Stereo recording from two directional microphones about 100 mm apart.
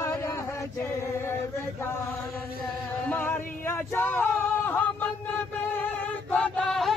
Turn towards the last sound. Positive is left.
turn(degrees=5)  # may be behind; listen again after turning